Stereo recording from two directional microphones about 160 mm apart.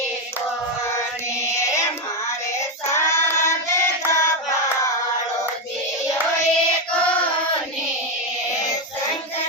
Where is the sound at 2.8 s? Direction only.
15° left (ahead or behind).